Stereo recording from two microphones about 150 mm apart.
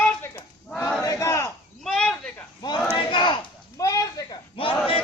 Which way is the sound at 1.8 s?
5° left (ahead or behind).